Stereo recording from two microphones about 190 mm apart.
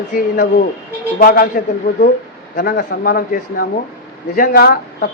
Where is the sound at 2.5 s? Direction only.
65° left (ahead or behind).